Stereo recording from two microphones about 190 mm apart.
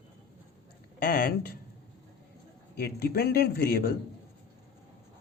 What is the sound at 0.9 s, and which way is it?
Speech, 45° left (ahead or behind).